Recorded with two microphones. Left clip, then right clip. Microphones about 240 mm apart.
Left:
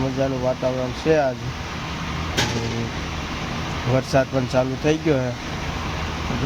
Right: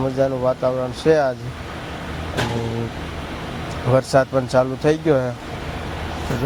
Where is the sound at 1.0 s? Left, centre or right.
Centre.